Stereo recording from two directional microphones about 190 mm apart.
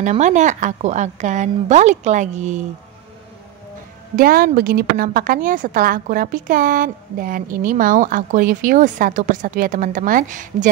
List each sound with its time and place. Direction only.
0.0 s a woman's voice: 40° right (ahead or behind)
4.2 s a woman's voice: 50° right (ahead or behind)